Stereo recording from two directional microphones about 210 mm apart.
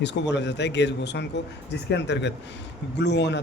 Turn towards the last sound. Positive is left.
turn(degrees=55)  # may be behind; listen again after turning